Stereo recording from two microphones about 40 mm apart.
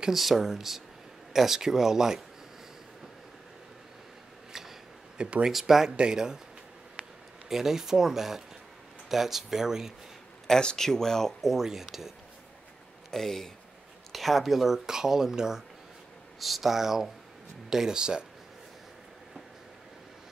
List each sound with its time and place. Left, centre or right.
0.1 s speech: centre
4.5 s a sound: centre
5.1 s speech: right
5.5 s speech: centre
5.9 s speech: right
7.4 s speech: centre
10.6 s speech: left
11.4 s speech: centre
13.1 s speech: centre
16.3 s speech: centre